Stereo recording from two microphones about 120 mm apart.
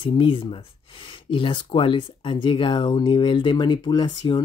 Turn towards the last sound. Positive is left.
turn(degrees=40)  # may be behind; listen again after turning